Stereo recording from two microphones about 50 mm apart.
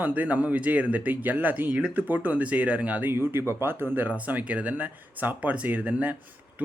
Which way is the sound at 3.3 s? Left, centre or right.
Right.